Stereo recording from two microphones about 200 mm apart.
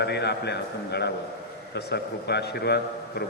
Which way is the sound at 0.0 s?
55° left (ahead or behind).